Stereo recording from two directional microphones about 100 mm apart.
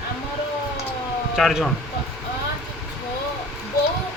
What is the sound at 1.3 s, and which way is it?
Speech, centre (ahead or behind).